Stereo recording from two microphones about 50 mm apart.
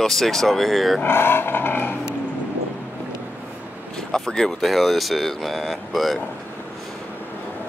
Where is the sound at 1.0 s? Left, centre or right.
Left.